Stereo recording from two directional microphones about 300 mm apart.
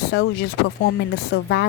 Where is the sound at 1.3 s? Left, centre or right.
Left.